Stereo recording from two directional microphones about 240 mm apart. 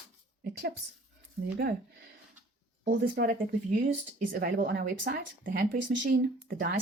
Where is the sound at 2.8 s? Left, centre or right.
Right.